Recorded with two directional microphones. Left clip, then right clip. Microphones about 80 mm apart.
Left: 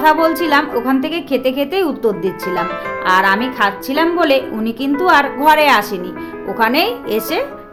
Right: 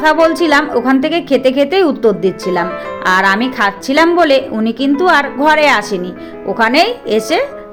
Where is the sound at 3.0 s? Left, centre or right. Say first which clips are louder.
Right 2 dB; right.